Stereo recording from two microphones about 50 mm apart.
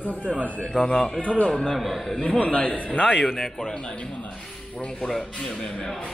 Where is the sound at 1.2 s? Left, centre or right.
Left.